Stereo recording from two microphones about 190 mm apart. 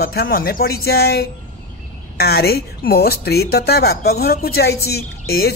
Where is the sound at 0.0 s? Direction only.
55° left (ahead or behind).